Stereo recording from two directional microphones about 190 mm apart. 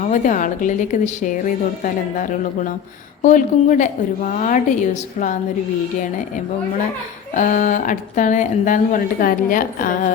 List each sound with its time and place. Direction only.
0.0 s a woman's voice: 40° left (ahead or behind)
7.3 s a woman's voice: 40° left (ahead or behind)